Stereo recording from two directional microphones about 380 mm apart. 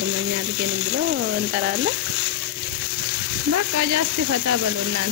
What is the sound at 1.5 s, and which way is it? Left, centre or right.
Frying, right.